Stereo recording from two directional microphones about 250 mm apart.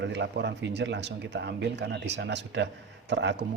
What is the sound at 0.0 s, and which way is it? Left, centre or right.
Speech, right.